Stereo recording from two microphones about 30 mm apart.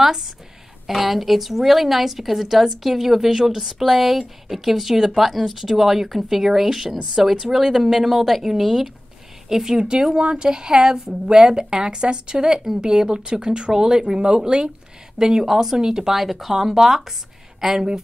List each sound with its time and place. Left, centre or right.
0.0 s a woman's voice: centre
9.7 s speech: right
15.1 s a woman's voice: centre
16.2 s a woman's voice: centre